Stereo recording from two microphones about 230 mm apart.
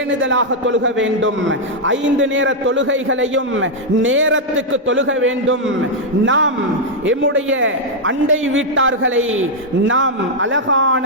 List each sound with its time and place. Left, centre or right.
0.2 s a man's voice: right